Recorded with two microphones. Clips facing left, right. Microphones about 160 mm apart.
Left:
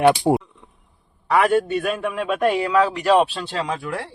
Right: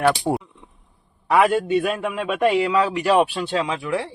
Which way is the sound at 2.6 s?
15° right (ahead or behind).